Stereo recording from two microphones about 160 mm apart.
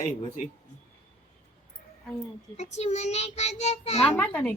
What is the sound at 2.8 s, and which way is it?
Child singing, 45° left (ahead or behind).